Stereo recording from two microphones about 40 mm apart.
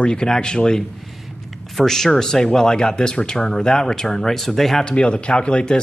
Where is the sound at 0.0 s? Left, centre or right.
Left; by 4.8 s centre.